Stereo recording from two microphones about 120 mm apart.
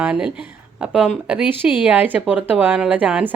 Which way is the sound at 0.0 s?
5° right (ahead or behind).